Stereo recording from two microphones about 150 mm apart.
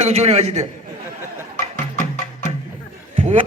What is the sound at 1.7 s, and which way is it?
Music, 55° left (ahead or behind).